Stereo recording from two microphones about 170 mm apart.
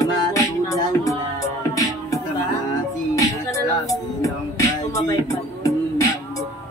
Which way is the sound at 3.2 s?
20° left (ahead or behind).